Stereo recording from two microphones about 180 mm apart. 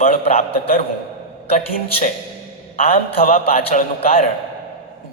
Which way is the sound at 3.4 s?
35° left (ahead or behind).